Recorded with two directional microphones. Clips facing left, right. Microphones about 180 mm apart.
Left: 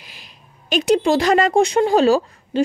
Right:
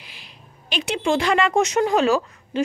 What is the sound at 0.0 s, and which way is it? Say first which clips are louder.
Speech: even; 45° left (ahead or behind).